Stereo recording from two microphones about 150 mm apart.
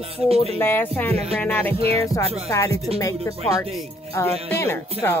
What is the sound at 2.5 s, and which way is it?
Music, 20° left (ahead or behind).